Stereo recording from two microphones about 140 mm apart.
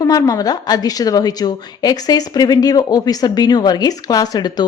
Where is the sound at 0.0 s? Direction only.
25° left (ahead or behind).